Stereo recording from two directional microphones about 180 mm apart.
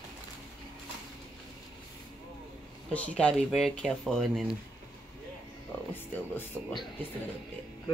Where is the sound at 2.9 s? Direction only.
5° left (ahead or behind).